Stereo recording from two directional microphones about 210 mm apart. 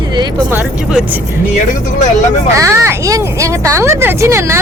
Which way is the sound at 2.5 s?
15° right (ahead or behind).